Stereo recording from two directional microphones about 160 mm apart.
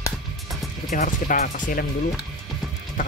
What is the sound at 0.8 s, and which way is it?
Speech, 60° left (ahead or behind).